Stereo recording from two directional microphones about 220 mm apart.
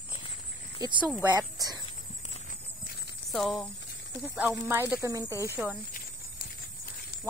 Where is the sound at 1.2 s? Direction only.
15° right (ahead or behind).